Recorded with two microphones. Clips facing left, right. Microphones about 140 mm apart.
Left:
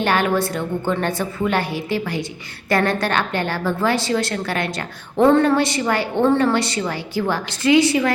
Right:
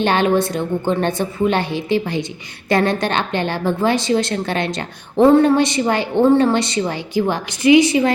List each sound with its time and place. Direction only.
0.0 s a woman's voice: 20° right (ahead or behind)